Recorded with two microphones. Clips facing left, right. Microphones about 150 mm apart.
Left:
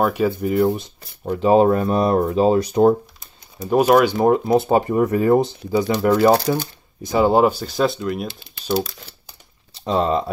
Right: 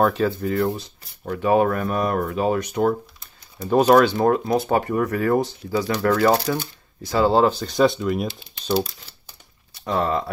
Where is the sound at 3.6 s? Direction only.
10° left (ahead or behind).